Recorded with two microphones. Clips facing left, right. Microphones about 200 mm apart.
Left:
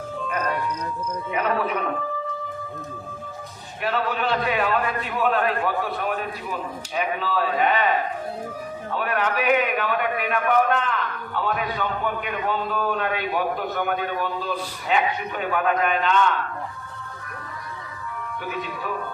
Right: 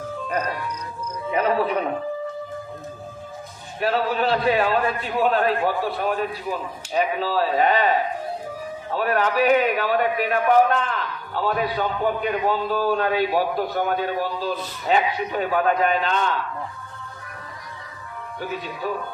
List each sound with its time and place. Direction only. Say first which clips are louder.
1.3 s a man's voice: right 4 dB; 35° right (ahead or behind)
3.8 s a man's voice: right 3 dB; 35° right (ahead or behind)
18.5 s a man's voice: right 3 dB; 35° right (ahead or behind)